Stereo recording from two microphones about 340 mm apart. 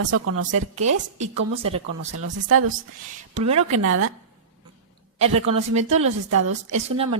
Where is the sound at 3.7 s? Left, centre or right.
Right.